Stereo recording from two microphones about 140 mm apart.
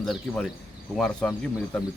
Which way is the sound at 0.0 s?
Centre (ahead or behind).